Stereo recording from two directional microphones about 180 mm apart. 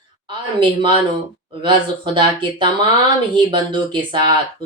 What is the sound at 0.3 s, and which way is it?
A woman's voice, 25° right (ahead or behind).